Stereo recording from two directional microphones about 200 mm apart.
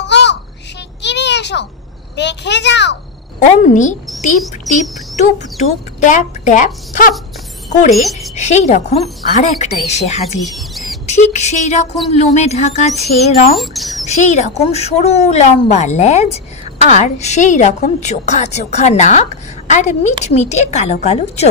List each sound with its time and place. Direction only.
0.0 s a sound: 60° left (ahead or behind)
2.1 s a child's voice: 60° left (ahead or behind)
3.3 s speech: 40° left (ahead or behind)
4.7 s speech: centre (ahead or behind)
5.1 s speech: 40° left (ahead or behind)
7.9 s speech: centre (ahead or behind)
8.4 s speech: 35° left (ahead or behind)
10.4 s rodents: centre (ahead or behind)
11.1 s speech: 35° left (ahead or behind)
13.6 s speech: centre (ahead or behind)
14.0 s speech: 35° left (ahead or behind)